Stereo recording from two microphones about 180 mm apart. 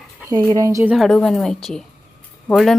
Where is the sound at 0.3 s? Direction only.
20° right (ahead or behind).